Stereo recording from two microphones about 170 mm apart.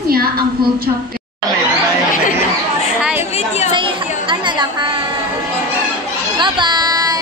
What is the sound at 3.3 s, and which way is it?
Chatter, 40° left (ahead or behind).